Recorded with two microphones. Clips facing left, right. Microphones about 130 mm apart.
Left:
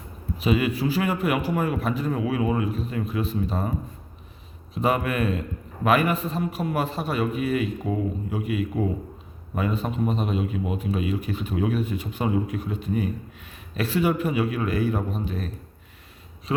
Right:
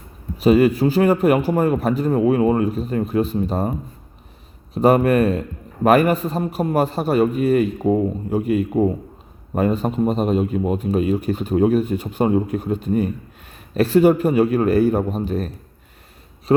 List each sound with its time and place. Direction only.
0.4 s a man's voice: 40° right (ahead or behind)
16.5 s speech: 40° right (ahead or behind)